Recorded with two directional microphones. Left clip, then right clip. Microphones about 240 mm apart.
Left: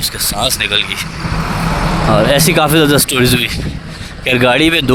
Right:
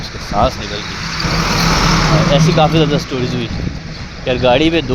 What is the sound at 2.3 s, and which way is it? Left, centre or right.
Speech, left.